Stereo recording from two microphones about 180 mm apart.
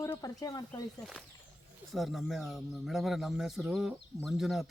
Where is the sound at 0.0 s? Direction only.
15° left (ahead or behind).